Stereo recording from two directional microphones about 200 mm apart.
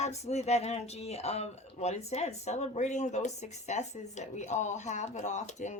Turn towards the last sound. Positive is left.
turn(degrees=35)  # may be behind; listen again after turning